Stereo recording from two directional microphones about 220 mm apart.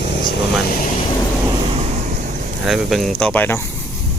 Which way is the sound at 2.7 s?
Centre (ahead or behind).